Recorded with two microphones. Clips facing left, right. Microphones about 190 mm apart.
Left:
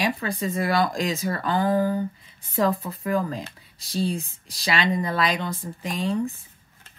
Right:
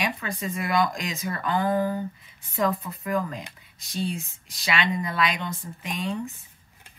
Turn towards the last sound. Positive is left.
turn(degrees=35)  # may be behind; listen again after turning